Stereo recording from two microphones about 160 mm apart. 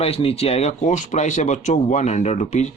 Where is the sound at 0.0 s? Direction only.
40° left (ahead or behind).